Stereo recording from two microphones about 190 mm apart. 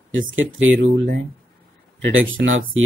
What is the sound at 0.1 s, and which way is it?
Speech, 90° right.